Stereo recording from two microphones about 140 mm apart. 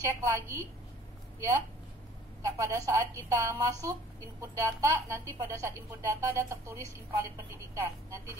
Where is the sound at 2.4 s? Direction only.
20° right (ahead or behind).